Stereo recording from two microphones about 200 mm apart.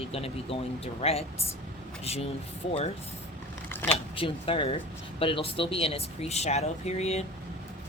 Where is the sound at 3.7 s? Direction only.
10° left (ahead or behind).